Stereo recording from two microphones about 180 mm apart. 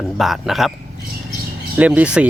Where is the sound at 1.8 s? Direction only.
5° right (ahead or behind).